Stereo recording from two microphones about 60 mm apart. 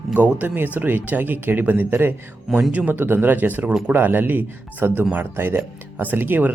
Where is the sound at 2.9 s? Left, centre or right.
Right.